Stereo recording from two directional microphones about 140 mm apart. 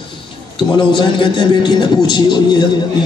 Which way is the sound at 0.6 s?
35° left (ahead or behind).